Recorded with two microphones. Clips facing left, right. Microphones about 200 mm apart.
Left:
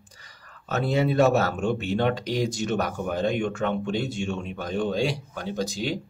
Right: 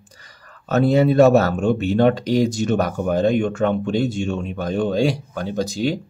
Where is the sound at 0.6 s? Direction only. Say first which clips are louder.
Right 8 dB; 45° right (ahead or behind).